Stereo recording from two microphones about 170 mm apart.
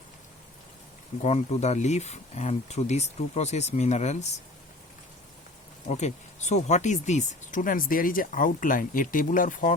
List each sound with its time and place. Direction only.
1.2 s speech: 40° left (ahead or behind)
5.9 s speech: 40° left (ahead or behind)